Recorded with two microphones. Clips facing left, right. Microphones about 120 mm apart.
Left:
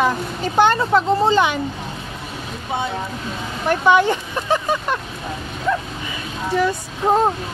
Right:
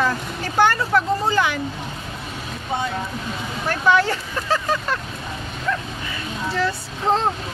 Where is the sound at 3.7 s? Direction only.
20° left (ahead or behind).